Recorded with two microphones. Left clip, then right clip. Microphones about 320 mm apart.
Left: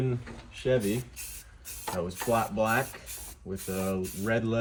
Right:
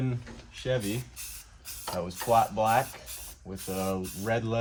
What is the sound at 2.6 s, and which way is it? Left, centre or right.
Speech, centre.